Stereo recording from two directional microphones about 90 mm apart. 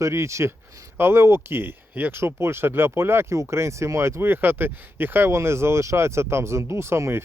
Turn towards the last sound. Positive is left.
turn(degrees=-30)  # may be behind; listen again after turning